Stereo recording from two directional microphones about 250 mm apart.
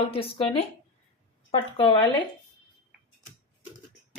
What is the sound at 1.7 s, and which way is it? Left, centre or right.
Speech, centre.